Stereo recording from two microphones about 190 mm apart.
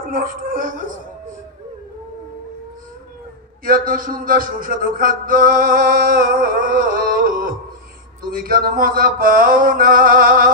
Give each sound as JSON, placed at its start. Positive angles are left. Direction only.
{"t": 0.1, "sound": "mantra", "side_deg": -50}
{"t": 3.6, "sound": "mantra", "side_deg": -50}
{"t": 5.2, "sound": "a sound", "side_deg": -45}
{"t": 8.2, "sound": "mantra", "side_deg": -50}